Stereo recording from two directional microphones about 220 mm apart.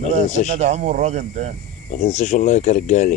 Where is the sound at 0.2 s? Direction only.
30° right (ahead or behind).